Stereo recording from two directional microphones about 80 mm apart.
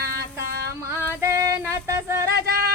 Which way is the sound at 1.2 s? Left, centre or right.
Right.